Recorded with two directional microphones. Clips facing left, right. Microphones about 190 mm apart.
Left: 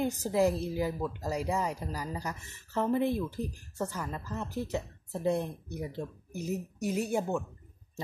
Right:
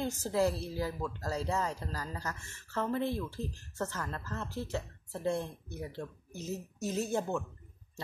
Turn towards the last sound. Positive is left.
turn(degrees=15)  # may be behind; listen again after turning